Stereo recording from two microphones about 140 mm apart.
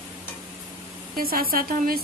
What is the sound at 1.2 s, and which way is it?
Speech, 90° right.